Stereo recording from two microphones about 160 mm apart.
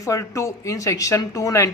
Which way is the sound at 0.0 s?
20° left (ahead or behind).